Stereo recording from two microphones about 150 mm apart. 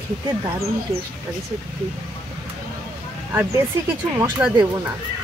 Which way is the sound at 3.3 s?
15° right (ahead or behind).